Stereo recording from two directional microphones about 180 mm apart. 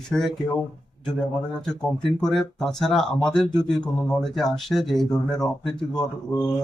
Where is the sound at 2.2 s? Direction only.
5° left (ahead or behind).